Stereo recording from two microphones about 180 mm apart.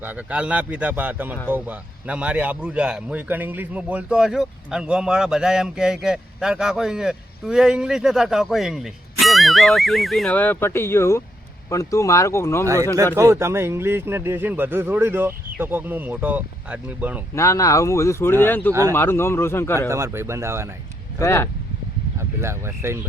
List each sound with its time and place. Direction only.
0.0 s a man's voice: 10° right (ahead or behind); by 12.6 s 15° left (ahead or behind)
12.6 s speech: 15° right (ahead or behind)
17.3 s speech: 15° left (ahead or behind)
18.7 s speech: 15° right (ahead or behind)
18.9 s speech: 15° left (ahead or behind)
19.9 s speech: 15° right (ahead or behind)
21.2 s speech: 15° left (ahead or behind)
22.2 s speech: 15° right (ahead or behind)